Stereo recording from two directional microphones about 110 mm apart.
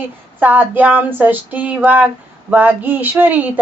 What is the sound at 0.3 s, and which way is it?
Speech, 15° right (ahead or behind).